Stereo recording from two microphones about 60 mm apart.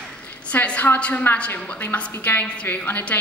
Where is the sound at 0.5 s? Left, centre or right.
Left.